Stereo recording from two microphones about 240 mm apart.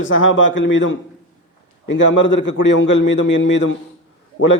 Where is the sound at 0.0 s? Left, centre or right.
Left.